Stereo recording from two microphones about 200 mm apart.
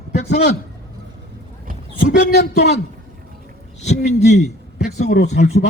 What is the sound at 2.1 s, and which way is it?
Speech, 55° left (ahead or behind).